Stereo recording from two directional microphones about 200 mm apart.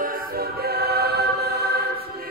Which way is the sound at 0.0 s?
45° right (ahead or behind).